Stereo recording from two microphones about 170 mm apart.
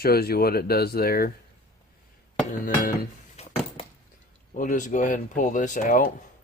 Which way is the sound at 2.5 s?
55° left (ahead or behind).